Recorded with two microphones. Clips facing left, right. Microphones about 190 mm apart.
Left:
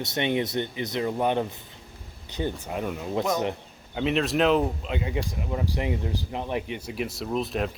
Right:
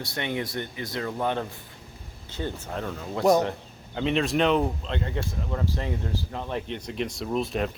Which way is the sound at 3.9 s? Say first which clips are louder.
Even; centre (ahead or behind).